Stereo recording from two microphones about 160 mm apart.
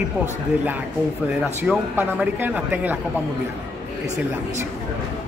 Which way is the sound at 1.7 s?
5° right (ahead or behind).